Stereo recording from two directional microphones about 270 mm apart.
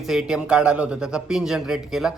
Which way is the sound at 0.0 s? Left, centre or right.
Centre.